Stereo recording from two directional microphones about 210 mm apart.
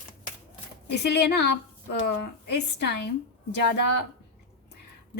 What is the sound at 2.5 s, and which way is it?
Speech, 50° left (ahead or behind).